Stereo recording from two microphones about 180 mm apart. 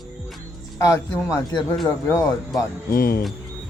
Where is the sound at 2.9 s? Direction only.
55° left (ahead or behind).